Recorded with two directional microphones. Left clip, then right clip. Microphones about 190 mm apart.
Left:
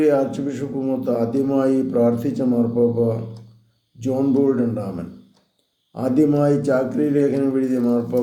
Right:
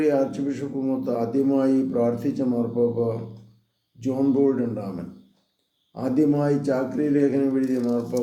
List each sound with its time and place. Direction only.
0.0 s speech: 10° left (ahead or behind)